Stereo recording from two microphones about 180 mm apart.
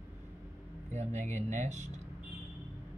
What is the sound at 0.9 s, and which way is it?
Speech, 40° right (ahead or behind).